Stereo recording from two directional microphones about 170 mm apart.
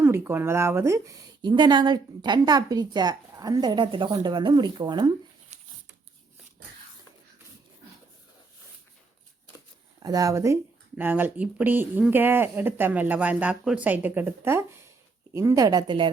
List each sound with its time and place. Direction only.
0.0 s speech: 15° right (ahead or behind)
10.0 s speech: 20° right (ahead or behind)